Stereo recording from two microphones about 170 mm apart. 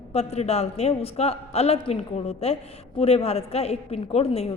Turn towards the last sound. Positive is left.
turn(degrees=35)  # may be behind; listen again after turning